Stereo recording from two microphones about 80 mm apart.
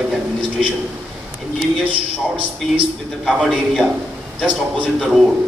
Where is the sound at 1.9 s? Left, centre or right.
Right.